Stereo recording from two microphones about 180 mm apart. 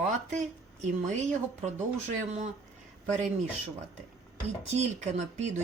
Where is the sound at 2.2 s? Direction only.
35° right (ahead or behind).